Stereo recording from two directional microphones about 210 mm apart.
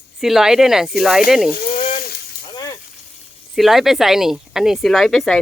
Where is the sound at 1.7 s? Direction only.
35° left (ahead or behind).